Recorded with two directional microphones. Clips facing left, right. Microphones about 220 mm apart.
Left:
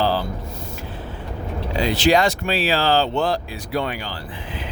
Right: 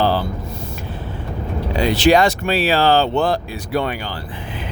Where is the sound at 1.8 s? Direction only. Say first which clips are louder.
Right 3 dB; 60° right (ahead or behind).